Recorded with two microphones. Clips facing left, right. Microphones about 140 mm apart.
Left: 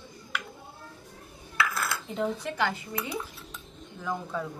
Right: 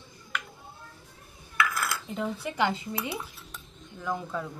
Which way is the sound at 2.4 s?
20° right (ahead or behind).